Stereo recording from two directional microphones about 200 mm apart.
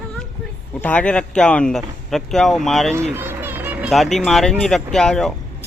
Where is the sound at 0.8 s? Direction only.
5° left (ahead or behind).